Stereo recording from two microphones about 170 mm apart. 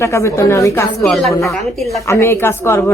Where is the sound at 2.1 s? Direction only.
15° left (ahead or behind).